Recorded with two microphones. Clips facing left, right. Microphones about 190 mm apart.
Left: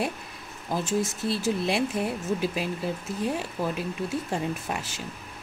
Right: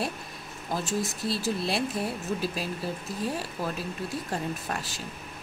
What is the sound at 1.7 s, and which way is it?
Speech, 15° left (ahead or behind).